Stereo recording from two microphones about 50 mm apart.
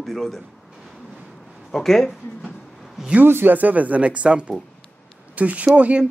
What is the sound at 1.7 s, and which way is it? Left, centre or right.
Speech, centre.